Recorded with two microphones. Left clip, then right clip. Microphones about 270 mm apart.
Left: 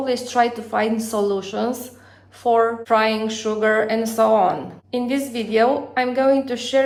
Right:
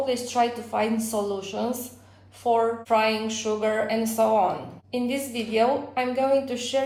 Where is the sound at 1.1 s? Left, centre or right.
Left.